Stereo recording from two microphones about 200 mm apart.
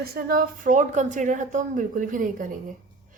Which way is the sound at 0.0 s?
50° right (ahead or behind).